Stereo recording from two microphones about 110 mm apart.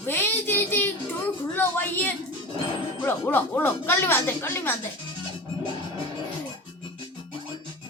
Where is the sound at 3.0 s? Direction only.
20° left (ahead or behind).